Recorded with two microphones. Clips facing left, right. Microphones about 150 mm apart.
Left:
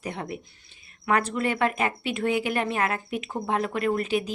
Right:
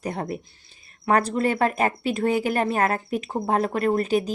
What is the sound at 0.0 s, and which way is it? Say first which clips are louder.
Speech: right 4 dB; 40° right (ahead or behind).